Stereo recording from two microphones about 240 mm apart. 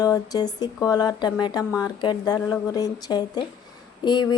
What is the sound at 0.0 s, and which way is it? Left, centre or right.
A woman's voice, centre.